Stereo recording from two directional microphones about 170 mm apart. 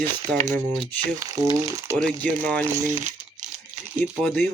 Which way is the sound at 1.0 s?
20° right (ahead or behind).